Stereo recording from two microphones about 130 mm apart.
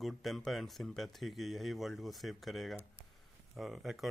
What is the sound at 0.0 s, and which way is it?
Speech, centre (ahead or behind).